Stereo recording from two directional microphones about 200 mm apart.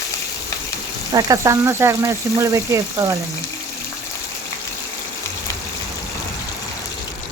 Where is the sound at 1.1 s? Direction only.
15° right (ahead or behind).